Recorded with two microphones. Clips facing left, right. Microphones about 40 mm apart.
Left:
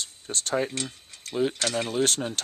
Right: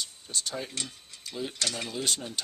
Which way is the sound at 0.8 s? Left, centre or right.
Centre.